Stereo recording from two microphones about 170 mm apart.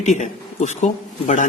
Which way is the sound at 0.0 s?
45° left (ahead or behind).